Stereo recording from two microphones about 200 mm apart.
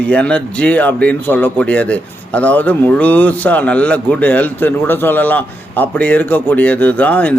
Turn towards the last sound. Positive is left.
turn(degrees=5)  # may be behind; listen again after turning